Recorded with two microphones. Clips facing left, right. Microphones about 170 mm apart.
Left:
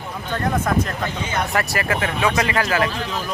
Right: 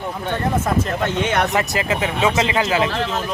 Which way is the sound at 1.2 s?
75° right (ahead or behind).